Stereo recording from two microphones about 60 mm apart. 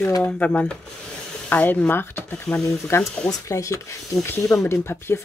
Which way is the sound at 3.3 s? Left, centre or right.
Left.